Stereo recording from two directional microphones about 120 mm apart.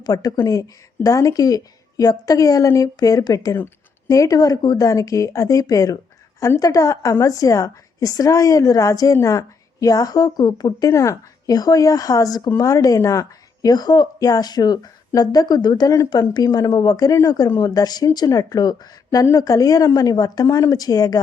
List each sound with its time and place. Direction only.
0.0 s a woman's voice: 35° left (ahead or behind)